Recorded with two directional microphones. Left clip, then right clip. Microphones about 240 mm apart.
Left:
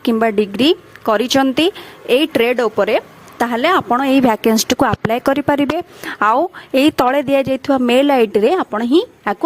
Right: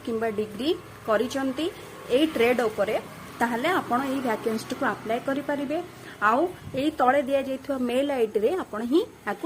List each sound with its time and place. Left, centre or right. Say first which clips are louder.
0.0 s speech: left 12 dB; left